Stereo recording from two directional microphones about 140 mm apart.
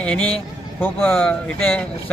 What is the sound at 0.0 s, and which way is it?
A man's voice, 10° left (ahead or behind).